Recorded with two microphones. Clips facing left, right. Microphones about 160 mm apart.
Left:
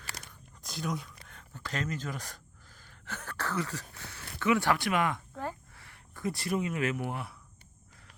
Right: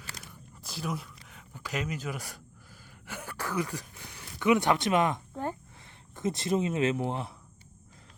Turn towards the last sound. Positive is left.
turn(degrees=-25)  # may be behind; listen again after turning